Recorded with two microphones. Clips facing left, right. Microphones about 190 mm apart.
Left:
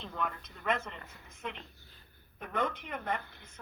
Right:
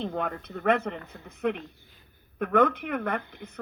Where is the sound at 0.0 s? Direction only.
55° right (ahead or behind).